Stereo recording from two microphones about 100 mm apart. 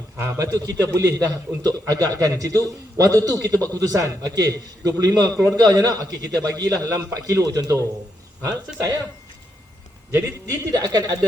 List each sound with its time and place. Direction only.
0.2 s a man's voice: 30° right (ahead or behind)
10.1 s a man's voice: 25° right (ahead or behind)
10.5 s a man's voice: 40° right (ahead or behind)